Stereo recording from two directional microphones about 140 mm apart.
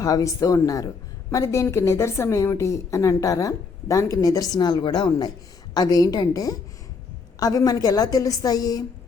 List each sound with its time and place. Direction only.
0.0 s a woman's voice: 25° left (ahead or behind)